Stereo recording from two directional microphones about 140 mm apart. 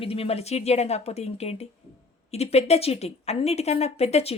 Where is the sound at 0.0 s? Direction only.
45° left (ahead or behind).